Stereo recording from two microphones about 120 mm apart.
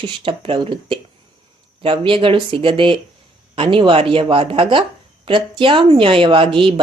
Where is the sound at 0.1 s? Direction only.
45° right (ahead or behind).